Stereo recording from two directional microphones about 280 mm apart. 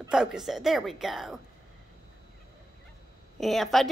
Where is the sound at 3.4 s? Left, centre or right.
Centre.